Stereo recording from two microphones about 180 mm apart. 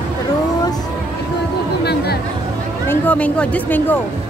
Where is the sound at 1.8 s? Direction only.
65° left (ahead or behind).